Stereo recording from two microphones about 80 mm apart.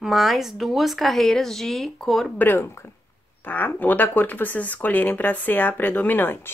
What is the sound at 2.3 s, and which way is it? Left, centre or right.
A woman's voice, left.